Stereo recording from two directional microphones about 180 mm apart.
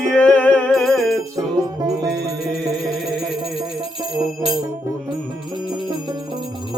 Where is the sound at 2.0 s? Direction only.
65° right (ahead or behind).